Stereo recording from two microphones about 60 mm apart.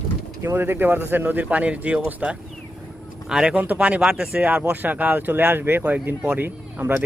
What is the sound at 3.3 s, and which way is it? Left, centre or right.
Speech, centre.